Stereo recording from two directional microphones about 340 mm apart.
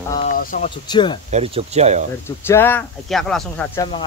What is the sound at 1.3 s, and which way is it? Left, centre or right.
Speech, centre.